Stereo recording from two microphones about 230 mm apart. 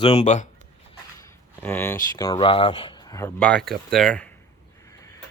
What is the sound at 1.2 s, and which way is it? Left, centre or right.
Speech, centre.